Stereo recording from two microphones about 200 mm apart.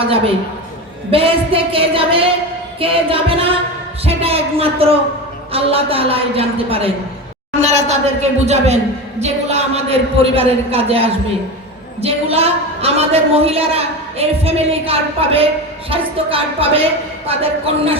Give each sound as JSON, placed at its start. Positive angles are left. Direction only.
{"t": 1.1, "sound": "a woman's voice", "side_deg": -30}